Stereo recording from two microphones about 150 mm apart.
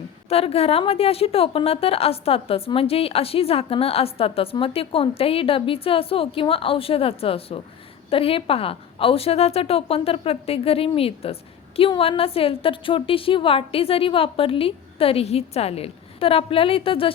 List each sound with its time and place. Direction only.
0.3 s a woman's voice: 40° left (ahead or behind)